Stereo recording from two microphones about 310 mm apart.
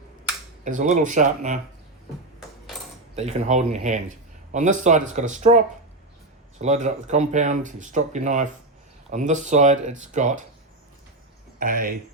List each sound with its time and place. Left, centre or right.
0.6 s speech: right
3.2 s speech: right
11.6 s speech: right